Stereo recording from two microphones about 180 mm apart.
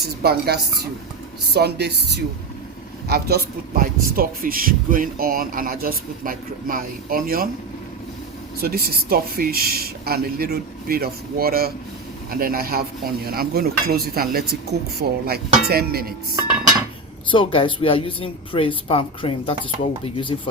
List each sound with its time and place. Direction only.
0.0 s a man's voice: 60° right (ahead or behind)
8.6 s speech: 60° right (ahead or behind)
17.2 s a woman's voice: 30° left (ahead or behind)